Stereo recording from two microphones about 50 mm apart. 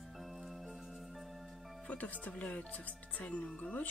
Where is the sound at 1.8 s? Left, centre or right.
Left.